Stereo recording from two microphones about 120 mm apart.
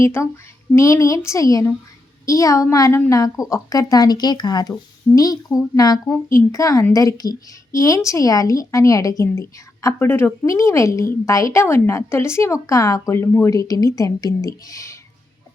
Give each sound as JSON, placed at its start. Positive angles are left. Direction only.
{"t": 0.0, "sound": "speech", "side_deg": 20}